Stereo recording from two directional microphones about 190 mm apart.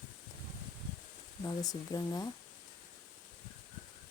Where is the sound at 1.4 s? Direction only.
20° left (ahead or behind).